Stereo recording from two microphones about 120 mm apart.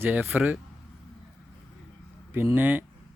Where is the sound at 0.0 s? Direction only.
15° right (ahead or behind).